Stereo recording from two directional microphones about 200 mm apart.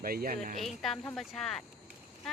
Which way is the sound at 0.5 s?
Centre (ahead or behind).